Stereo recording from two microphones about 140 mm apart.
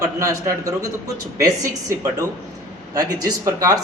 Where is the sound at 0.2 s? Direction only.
20° right (ahead or behind).